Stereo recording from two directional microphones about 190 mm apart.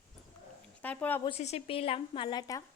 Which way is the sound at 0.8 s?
10° left (ahead or behind).